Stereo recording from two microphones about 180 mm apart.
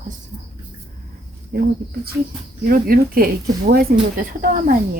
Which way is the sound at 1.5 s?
55° right (ahead or behind).